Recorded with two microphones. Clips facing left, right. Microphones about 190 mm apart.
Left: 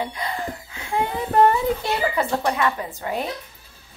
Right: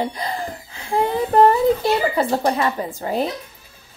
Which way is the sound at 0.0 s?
35° right (ahead or behind).